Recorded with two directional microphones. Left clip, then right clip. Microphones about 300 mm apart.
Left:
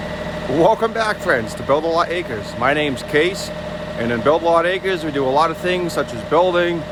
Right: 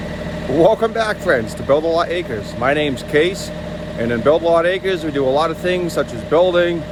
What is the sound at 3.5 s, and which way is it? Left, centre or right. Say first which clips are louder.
Vehicle: left 1 dB; centre.